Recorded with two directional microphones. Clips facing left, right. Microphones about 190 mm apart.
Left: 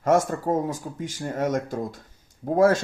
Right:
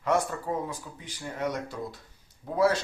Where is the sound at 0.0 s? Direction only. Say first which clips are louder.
Left 6 dB; 45° left (ahead or behind).